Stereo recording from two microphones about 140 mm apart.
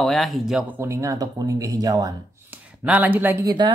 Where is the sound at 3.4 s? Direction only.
30° right (ahead or behind).